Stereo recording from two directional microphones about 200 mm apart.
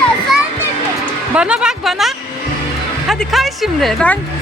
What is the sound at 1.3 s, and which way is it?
Speech, 5° right (ahead or behind).